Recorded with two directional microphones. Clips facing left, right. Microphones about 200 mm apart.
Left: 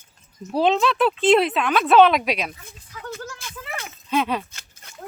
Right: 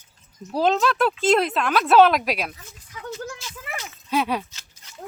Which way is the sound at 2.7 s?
55° left (ahead or behind).